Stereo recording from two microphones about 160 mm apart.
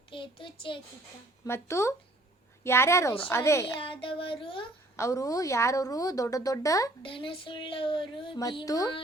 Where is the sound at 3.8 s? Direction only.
35° left (ahead or behind).